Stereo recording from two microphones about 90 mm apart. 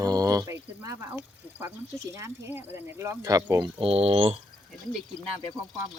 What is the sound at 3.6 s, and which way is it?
Speech, 90° right.